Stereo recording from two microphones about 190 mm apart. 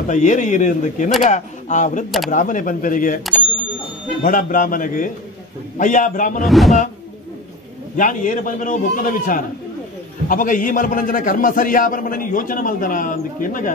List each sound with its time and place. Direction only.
0.1 s speech: 40° left (ahead or behind)
2.0 s speech: centre (ahead or behind)
2.3 s a man's voice: 45° left (ahead or behind)
4.2 s a man's voice: 45° left (ahead or behind)
6.4 s speech: centre (ahead or behind)
7.9 s a man's voice: 45° left (ahead or behind)